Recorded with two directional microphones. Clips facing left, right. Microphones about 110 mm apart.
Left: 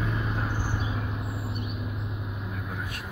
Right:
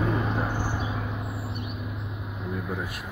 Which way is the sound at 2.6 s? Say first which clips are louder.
Right 4 dB; 10° right (ahead or behind).